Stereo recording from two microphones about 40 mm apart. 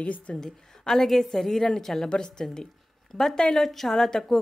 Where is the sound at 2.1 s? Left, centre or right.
Centre.